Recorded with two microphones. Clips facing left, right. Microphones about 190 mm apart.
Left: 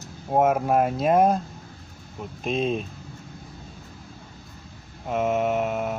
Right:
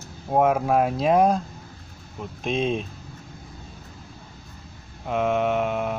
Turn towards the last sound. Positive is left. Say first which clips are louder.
# right 1 dB
turn(degrees=0)  # may be behind; listen again after turning